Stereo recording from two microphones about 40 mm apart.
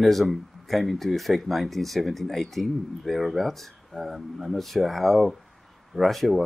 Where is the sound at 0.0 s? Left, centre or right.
Centre.